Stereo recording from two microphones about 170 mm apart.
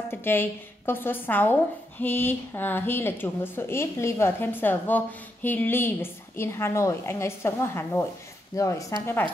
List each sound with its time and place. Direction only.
0.1 s speech: 10° left (ahead or behind)